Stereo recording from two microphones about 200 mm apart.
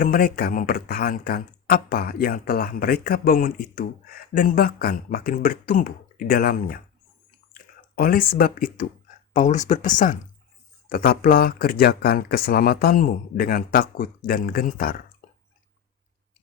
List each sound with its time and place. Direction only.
0.0 s speech: 45° left (ahead or behind)
7.3 s a sound: 45° left (ahead or behind)
9.3 s speech: 40° left (ahead or behind)